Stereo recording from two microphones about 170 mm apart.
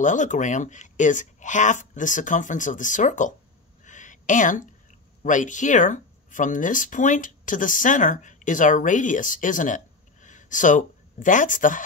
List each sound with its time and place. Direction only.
0.0 s speech: 45° left (ahead or behind)
3.8 s a sound: 45° left (ahead or behind)
5.2 s speech: 50° left (ahead or behind)